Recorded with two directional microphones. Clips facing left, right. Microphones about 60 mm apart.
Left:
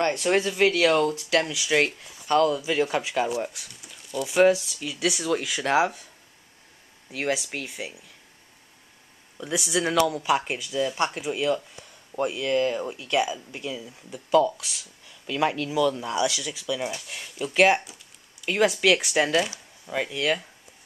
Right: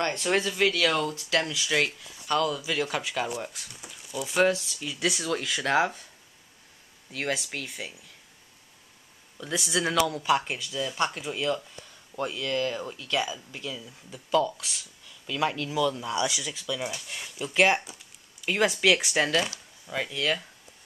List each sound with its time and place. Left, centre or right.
0.3 s speech: centre
3.3 s speech: centre
4.4 s speech: centre
7.2 s speech: centre
9.4 s speech: centre
15.0 s speech: centre
16.3 s speech: centre